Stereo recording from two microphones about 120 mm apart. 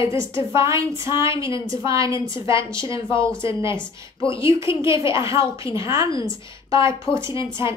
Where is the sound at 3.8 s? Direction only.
45° left (ahead or behind).